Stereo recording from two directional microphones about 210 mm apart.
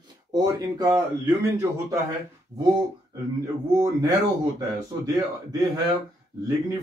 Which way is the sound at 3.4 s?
15° right (ahead or behind).